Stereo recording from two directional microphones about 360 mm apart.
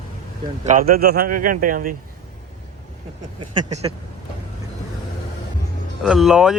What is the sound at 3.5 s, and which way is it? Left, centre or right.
Speech, centre.